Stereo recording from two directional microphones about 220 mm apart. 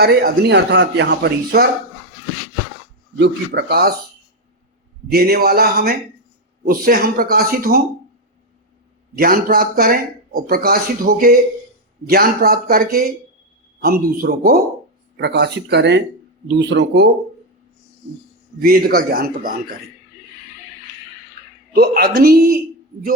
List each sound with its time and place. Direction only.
0.0 s speech: 50° right (ahead or behind)
3.2 s speech: 50° right (ahead or behind)
5.0 s speech: 45° right (ahead or behind)
9.1 s speech: 45° right (ahead or behind)
18.6 s speech: 45° right (ahead or behind)
21.8 s speech: 45° right (ahead or behind)